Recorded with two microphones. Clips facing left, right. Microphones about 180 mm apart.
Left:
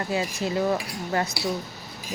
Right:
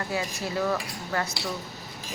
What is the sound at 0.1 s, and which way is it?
Speech, 20° left (ahead or behind).